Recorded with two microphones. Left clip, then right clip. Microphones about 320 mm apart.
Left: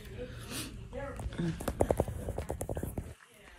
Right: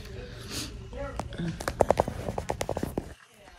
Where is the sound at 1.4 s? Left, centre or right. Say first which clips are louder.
Right 1 dB; centre.